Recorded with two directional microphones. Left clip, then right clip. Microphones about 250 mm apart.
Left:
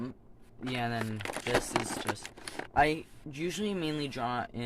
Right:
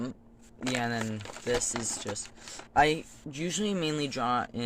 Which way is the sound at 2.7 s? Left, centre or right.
Right.